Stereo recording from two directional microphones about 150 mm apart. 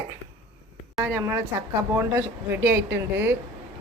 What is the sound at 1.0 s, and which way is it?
Speech, 15° right (ahead or behind).